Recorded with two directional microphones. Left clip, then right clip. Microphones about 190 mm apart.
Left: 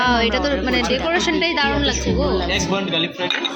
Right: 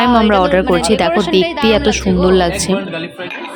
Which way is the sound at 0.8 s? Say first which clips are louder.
Right 7 dB; 50° right (ahead or behind).